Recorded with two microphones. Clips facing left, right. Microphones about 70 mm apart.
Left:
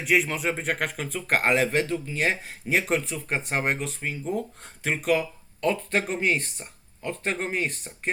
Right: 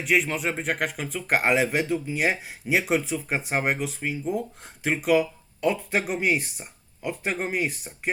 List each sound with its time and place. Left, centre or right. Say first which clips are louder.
0.0 s speech: even; centre